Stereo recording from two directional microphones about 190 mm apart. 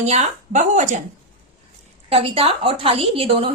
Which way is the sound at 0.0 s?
35° right (ahead or behind).